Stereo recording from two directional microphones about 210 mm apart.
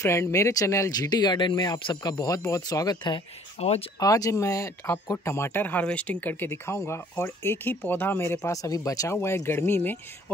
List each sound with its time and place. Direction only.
0.0 s speech: 15° left (ahead or behind)